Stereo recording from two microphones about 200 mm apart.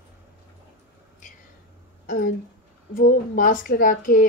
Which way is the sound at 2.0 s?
40° left (ahead or behind).